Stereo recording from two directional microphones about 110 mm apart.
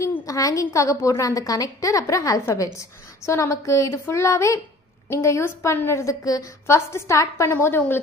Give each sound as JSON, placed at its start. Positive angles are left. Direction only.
{"t": 0.3, "sound": "a woman's voice", "side_deg": 30}